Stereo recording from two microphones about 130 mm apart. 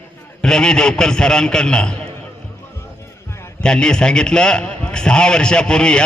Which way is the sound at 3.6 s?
5° left (ahead or behind).